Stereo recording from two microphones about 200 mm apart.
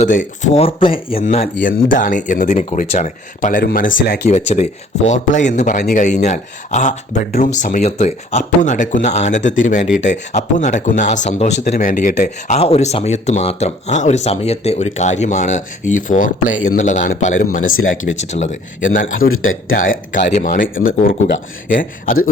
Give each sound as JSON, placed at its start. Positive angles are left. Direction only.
{"t": 0.0, "sound": "speech", "side_deg": 40}
{"t": 17.7, "sound": "speech", "side_deg": 85}
{"t": 18.0, "sound": "speech", "side_deg": 35}
{"t": 19.0, "sound": "a man's voice", "side_deg": 90}
{"t": 20.2, "sound": "speech", "side_deg": 40}